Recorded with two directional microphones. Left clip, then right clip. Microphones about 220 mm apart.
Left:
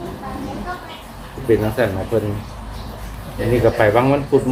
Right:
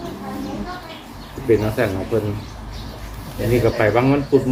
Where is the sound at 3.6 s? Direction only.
10° left (ahead or behind).